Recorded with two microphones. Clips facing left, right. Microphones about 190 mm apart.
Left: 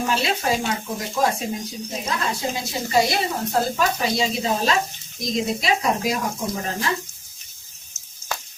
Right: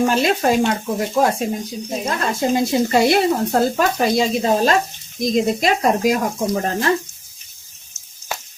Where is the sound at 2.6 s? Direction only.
60° right (ahead or behind).